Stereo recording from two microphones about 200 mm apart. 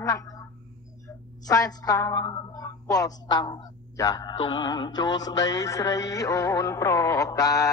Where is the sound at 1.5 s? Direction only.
15° left (ahead or behind).